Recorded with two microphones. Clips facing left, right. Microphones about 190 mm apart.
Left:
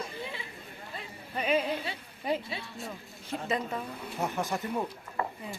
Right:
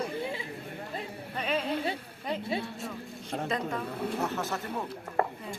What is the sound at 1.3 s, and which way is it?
Speech, 10° left (ahead or behind).